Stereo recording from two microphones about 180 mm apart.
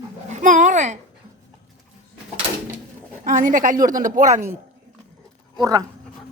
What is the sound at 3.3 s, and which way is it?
A woman's voice, 45° right (ahead or behind).